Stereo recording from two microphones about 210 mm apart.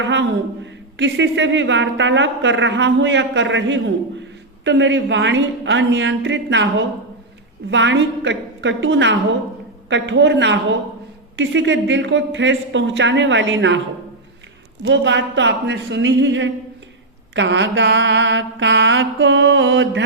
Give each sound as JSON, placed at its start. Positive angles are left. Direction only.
{"t": 0.0, "sound": "speech", "side_deg": -60}
{"t": 14.8, "sound": "speech", "side_deg": -60}